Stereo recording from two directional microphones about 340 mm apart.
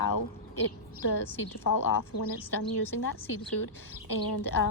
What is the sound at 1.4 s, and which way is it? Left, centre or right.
A woman's voice, left.